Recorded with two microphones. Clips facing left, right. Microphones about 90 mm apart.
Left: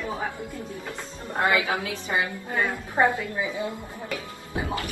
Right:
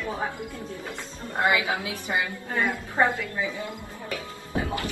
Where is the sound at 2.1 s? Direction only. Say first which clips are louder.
Left 1 dB; 25° left (ahead or behind).